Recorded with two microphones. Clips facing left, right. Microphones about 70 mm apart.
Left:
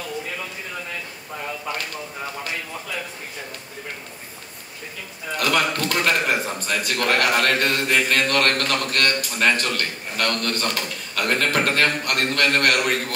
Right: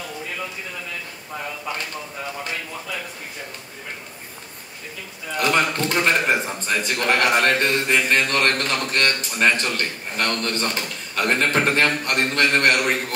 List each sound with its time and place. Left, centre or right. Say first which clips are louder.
5.4 s a man's voice: right 1 dB; right